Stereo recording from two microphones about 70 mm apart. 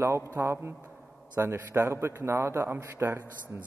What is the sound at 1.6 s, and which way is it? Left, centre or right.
A man's voice, right.